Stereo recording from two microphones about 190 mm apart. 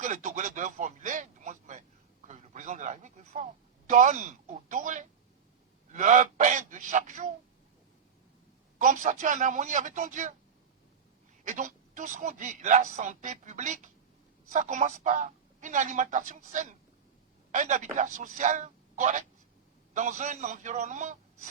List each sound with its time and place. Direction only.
0.0 s a sound: 40° right (ahead or behind)
8.8 s a man's voice: 40° right (ahead or behind)
11.4 s a man's voice: 40° right (ahead or behind)